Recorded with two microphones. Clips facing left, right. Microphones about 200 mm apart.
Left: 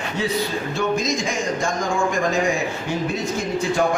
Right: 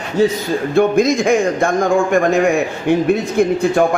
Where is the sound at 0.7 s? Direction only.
55° right (ahead or behind).